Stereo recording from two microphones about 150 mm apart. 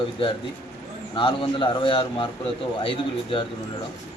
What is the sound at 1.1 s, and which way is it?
A man's voice, 35° left (ahead or behind).